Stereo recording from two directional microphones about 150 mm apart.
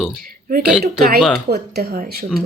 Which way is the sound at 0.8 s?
90° right.